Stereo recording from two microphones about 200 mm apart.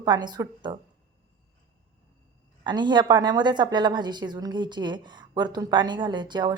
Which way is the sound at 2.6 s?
20° right (ahead or behind).